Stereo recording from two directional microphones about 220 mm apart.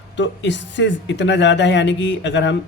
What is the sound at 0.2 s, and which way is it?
Speech, 55° left (ahead or behind).